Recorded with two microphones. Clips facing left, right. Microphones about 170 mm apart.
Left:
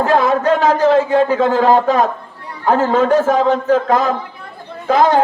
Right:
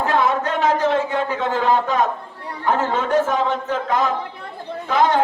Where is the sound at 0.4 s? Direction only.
35° left (ahead or behind).